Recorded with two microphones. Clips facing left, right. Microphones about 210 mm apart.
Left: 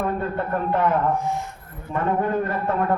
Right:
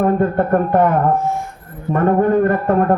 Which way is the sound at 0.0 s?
50° right (ahead or behind).